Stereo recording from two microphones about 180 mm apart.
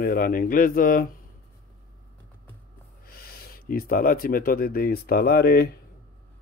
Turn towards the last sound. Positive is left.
turn(degrees=60)  # may be behind; listen again after turning